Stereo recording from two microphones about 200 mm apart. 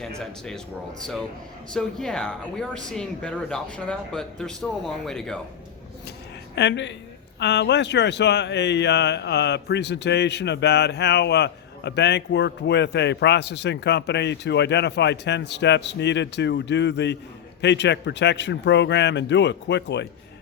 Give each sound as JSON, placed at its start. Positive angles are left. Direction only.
{"t": 0.2, "sound": "speech", "side_deg": 5}
{"t": 6.6, "sound": "speech", "side_deg": 65}